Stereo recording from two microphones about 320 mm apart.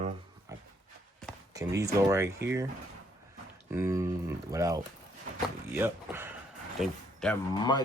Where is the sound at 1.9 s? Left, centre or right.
Centre.